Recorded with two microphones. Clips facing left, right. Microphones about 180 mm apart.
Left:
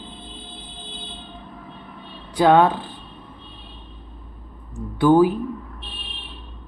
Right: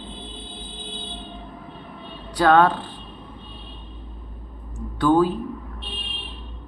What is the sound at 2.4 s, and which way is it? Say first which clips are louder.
Speech: left 1 dB; 15° left (ahead or behind).